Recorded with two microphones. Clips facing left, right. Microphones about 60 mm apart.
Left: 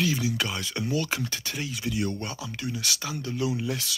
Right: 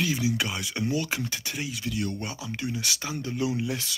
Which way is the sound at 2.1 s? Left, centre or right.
Centre.